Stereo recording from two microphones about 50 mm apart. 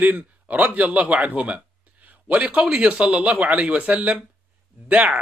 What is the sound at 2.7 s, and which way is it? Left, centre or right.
Speech, right.